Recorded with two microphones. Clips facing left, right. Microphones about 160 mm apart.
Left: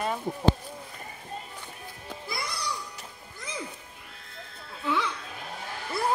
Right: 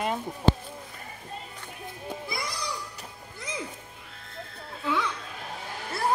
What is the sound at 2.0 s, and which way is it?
Music, 20° right (ahead or behind).